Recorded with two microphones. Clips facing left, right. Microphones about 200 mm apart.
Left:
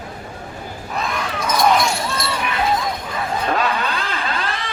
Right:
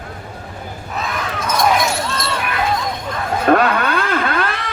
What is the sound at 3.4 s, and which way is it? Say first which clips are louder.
Vehicle: right 8 dB; 60° right (ahead or behind).